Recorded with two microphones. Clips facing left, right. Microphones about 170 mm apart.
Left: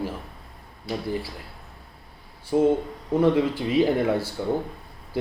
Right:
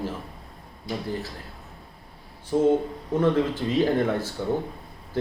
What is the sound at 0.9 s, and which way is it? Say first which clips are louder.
Speech: left 1 dB; 75° left (ahead or behind).